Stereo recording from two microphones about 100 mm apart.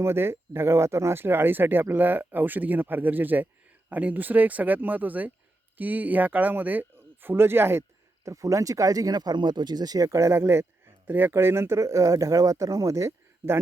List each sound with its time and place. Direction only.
0.0 s speech: 25° right (ahead or behind)